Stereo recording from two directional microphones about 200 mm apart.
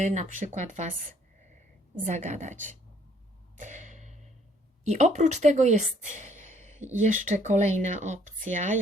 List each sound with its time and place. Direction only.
0.0 s speech: 35° right (ahead or behind)
2.0 s speech: 35° right (ahead or behind)
3.6 s a sound: 35° right (ahead or behind)
4.9 s speech: 35° right (ahead or behind)